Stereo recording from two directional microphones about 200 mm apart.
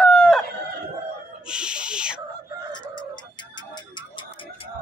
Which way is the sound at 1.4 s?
5° right (ahead or behind).